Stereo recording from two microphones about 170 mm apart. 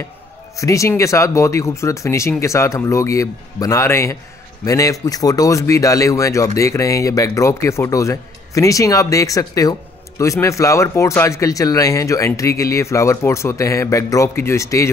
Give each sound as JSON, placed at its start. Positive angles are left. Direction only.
{"t": 0.6, "sound": "speech", "side_deg": 20}